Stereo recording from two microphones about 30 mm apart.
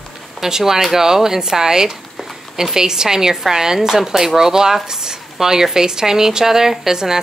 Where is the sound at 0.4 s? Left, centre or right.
Centre.